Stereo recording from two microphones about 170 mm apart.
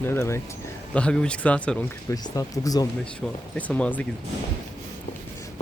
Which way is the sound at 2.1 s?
20° left (ahead or behind).